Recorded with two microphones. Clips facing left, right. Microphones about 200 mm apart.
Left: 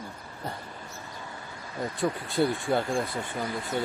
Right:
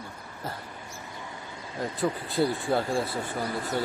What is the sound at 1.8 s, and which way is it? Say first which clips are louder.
Speech: even; centre (ahead or behind).